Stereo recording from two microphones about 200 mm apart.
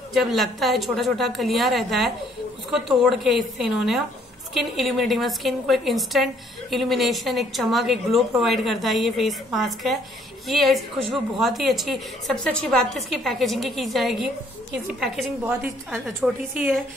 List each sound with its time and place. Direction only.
0.1 s a woman's voice: centre (ahead or behind)